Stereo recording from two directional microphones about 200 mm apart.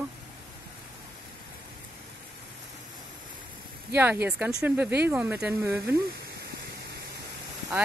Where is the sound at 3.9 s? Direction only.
10° right (ahead or behind).